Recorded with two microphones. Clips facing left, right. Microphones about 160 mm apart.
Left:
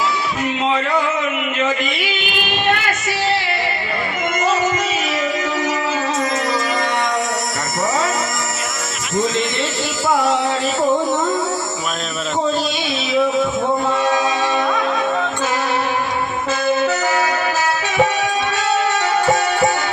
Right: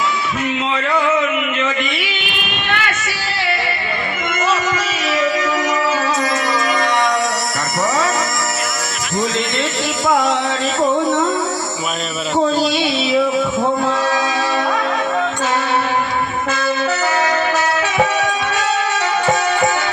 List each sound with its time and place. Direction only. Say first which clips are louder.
2.6 s child singing: left 2 dB; 35° left (ahead or behind)